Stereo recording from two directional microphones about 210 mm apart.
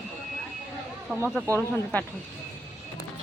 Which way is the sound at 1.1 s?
5° left (ahead or behind).